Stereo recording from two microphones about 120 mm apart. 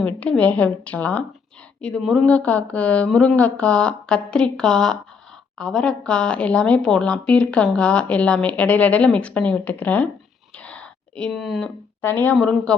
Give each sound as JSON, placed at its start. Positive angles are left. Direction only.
{"t": 0.0, "sound": "speech", "side_deg": 10}
{"t": 10.6, "sound": "a sound", "side_deg": 10}
{"t": 12.0, "sound": "speech", "side_deg": 15}
{"t": 12.4, "sound": "a woman's voice", "side_deg": 5}